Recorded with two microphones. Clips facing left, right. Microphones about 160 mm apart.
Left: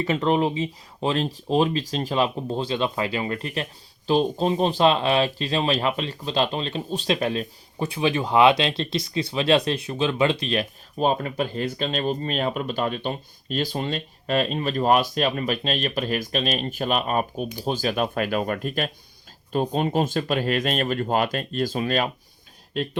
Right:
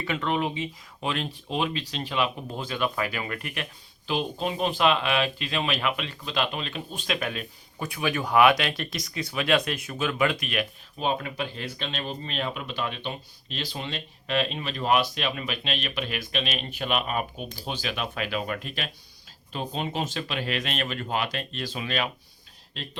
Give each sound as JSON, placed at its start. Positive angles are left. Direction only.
{"t": 0.0, "sound": "speech", "side_deg": 35}